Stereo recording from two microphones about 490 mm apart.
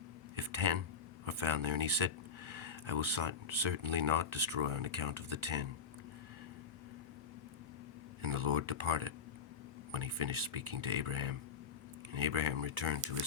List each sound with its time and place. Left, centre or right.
0.3 s a sound: right
1.2 s speech: right
8.2 s speech: right